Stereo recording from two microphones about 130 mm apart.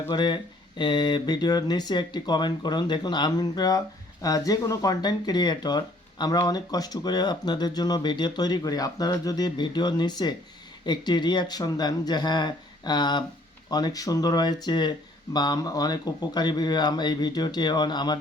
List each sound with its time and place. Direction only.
0.1 s speech: 35° left (ahead or behind)